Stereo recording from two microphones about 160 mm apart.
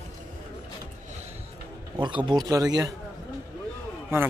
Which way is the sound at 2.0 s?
30° right (ahead or behind).